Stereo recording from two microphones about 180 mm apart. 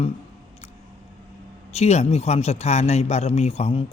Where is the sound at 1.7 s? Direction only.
35° left (ahead or behind).